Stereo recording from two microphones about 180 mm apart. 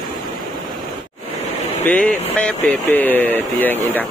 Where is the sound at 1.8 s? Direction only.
5° left (ahead or behind).